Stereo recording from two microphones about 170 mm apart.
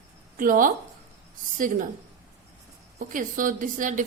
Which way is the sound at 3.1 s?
50° right (ahead or behind).